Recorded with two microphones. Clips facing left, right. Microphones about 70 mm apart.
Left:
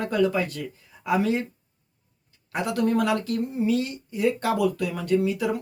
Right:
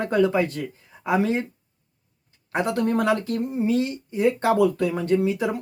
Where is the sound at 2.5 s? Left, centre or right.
Right.